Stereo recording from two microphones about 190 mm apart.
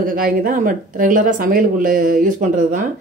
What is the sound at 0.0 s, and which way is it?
Speech, 50° right (ahead or behind).